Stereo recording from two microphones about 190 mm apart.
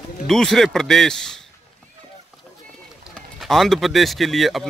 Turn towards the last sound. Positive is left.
turn(degrees=0)  # may be behind; listen again after turning